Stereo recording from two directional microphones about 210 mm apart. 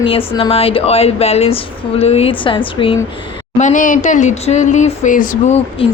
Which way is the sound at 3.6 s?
35° left (ahead or behind).